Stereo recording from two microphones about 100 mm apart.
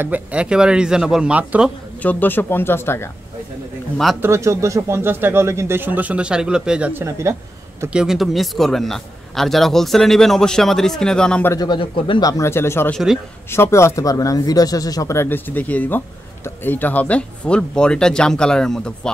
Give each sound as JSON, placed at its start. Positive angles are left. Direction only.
{"t": 0.0, "sound": "speech", "side_deg": -15}
{"t": 2.0, "sound": "speech", "side_deg": 15}
{"t": 4.2, "sound": "speech", "side_deg": -30}
{"t": 6.9, "sound": "speech", "side_deg": -25}
{"t": 7.9, "sound": "a man's voice", "side_deg": -5}
{"t": 11.5, "sound": "speech", "side_deg": 45}
{"t": 11.8, "sound": "speech", "side_deg": 60}
{"t": 12.2, "sound": "speech", "side_deg": 35}
{"t": 15.1, "sound": "speech", "side_deg": 20}